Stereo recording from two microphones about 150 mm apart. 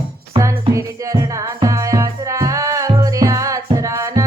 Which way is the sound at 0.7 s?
20° right (ahead or behind).